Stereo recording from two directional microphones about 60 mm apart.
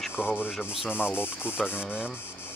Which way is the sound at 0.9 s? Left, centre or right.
Left.